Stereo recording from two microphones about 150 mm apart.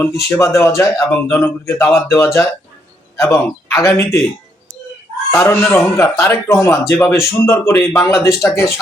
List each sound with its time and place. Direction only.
0.3 s a man's voice: 20° left (ahead or behind)
5.3 s a man's voice: 15° left (ahead or behind)